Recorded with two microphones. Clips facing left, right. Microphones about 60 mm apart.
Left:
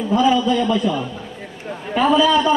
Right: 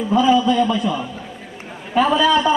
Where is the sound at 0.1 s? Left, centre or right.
Centre.